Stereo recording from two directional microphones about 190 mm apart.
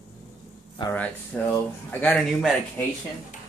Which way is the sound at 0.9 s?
10° left (ahead or behind).